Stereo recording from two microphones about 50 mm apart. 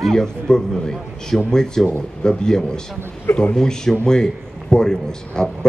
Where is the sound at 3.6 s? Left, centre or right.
Centre.